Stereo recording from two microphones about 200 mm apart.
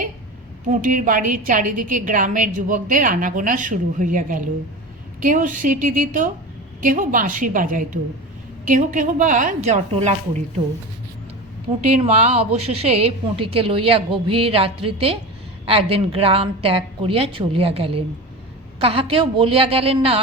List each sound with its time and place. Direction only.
0.7 s a woman's voice: 40° right (ahead or behind)
11.9 s a woman's voice: 30° right (ahead or behind)